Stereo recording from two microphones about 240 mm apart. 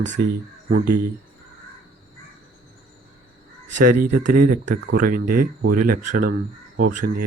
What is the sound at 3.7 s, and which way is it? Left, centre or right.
Speech, right.